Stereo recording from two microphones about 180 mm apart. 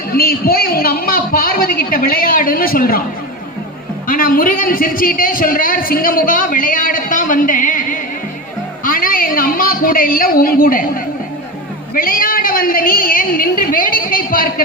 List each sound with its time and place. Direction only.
0.1 s a woman's voice: 55° left (ahead or behind)
4.0 s a man's voice: 50° left (ahead or behind)
8.8 s a sound: 50° left (ahead or behind)
11.9 s a man's voice: 50° left (ahead or behind)